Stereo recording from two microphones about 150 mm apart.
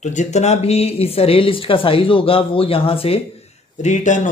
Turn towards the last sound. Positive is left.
turn(degrees=55)  # may be behind; listen again after turning